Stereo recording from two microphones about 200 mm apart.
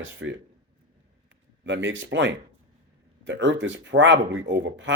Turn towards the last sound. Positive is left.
turn(degrees=-65)  # may be behind; listen again after turning